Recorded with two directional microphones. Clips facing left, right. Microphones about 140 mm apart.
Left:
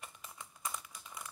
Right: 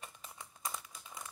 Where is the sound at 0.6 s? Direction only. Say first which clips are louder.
Even; 20° right (ahead or behind).